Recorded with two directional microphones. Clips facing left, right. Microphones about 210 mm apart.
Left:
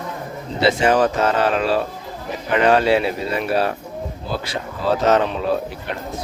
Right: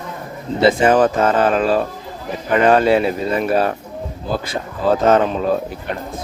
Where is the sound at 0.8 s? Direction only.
50° right (ahead or behind).